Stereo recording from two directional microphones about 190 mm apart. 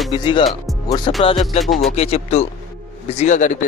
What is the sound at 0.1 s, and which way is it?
A man's voice, 25° left (ahead or behind).